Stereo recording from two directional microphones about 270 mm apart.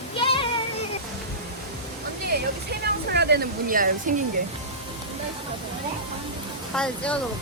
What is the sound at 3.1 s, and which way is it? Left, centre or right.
Speech, right.